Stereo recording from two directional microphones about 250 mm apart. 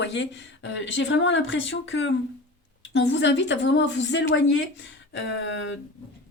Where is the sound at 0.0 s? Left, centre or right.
Left.